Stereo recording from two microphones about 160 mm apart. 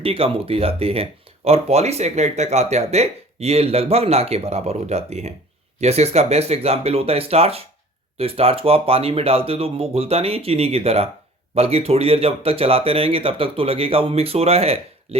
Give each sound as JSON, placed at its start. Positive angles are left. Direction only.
{"t": 0.0, "sound": "speech", "side_deg": -35}